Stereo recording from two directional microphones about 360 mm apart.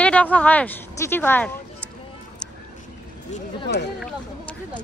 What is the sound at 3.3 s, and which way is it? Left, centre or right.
Speech, left.